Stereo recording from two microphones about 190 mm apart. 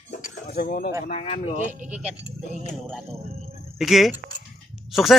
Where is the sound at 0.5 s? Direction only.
50° left (ahead or behind).